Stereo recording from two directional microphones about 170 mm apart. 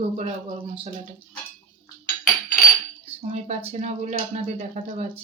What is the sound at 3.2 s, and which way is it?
Speech, 40° right (ahead or behind).